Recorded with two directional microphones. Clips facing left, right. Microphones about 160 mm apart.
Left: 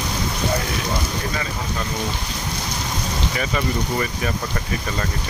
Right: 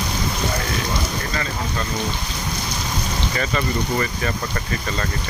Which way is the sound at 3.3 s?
5° left (ahead or behind).